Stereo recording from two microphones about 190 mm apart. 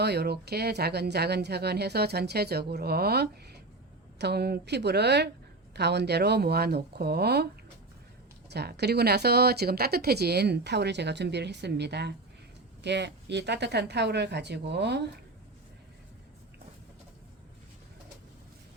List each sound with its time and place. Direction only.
0.0 s speech: 60° right (ahead or behind)
8.4 s speech: 60° right (ahead or behind)